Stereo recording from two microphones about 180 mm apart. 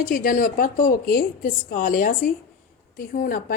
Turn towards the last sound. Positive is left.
turn(degrees=50)  # may be behind; listen again after turning